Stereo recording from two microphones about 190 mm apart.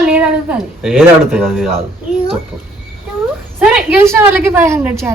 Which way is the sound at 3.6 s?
5° right (ahead or behind).